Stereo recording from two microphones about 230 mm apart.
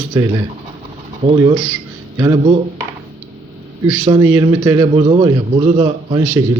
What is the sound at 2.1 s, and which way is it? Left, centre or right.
Speech, centre.